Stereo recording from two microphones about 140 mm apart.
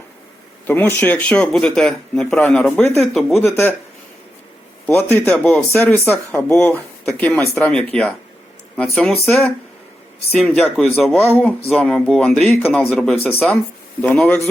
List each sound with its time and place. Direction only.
0.7 s a man's voice: 15° left (ahead or behind)
3.4 s speech: 15° left (ahead or behind)
4.9 s speech: 15° left (ahead or behind)
10.5 s a man's voice: 5° left (ahead or behind)